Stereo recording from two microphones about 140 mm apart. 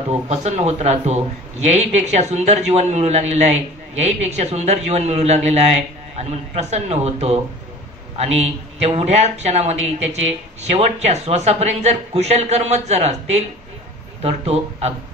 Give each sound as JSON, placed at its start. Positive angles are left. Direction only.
{"t": 0.3, "sound": "a man's voice", "side_deg": -50}